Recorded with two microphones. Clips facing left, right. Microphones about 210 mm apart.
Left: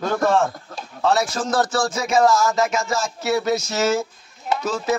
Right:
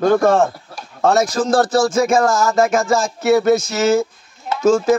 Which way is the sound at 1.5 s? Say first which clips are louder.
Right 6 dB; 35° right (ahead or behind).